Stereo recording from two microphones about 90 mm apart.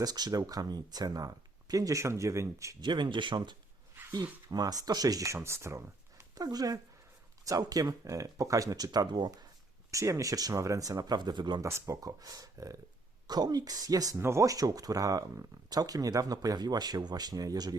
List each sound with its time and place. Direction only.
0.0 s speech: 45° right (ahead or behind)
2.8 s speech: 60° right (ahead or behind)
4.1 s speech: 45° right (ahead or behind)
9.9 s speech: 35° right (ahead or behind); by 11.6 s 55° right (ahead or behind)
11.6 s speech: 40° right (ahead or behind)
14.2 s speech: 30° right (ahead or behind)